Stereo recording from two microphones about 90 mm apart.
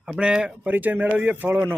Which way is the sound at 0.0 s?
10° right (ahead or behind).